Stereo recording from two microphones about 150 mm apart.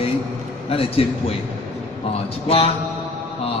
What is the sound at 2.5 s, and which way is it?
Speech, 40° left (ahead or behind).